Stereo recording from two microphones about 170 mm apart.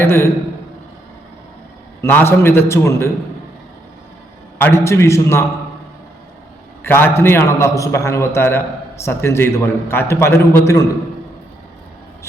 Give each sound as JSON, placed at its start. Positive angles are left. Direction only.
{"t": 0.0, "sound": "a man's voice", "side_deg": 15}
{"t": 2.0, "sound": "a man's voice", "side_deg": 10}
{"t": 4.5, "sound": "a man's voice", "side_deg": 15}
{"t": 6.8, "sound": "a man's voice", "side_deg": 15}